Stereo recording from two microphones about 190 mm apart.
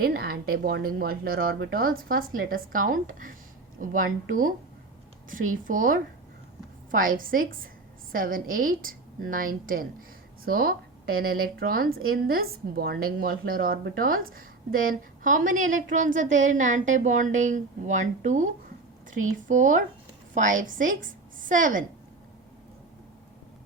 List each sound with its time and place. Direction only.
0.0 s a woman's voice: 50° right (ahead or behind)